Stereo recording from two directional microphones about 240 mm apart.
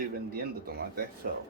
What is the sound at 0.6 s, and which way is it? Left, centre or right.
Speech, right.